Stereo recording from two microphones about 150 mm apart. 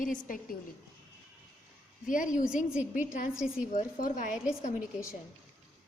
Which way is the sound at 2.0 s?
60° left (ahead or behind).